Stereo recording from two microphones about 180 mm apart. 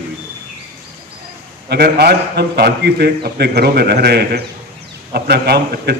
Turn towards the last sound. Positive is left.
turn(degrees=-60)  # may be behind; listen again after turning